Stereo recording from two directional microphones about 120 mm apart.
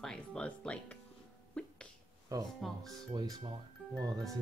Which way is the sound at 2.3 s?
30° right (ahead or behind).